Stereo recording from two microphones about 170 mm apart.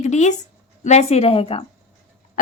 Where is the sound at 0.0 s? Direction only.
45° left (ahead or behind).